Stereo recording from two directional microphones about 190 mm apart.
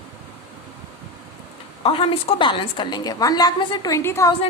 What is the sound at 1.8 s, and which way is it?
A woman's voice, 30° left (ahead or behind).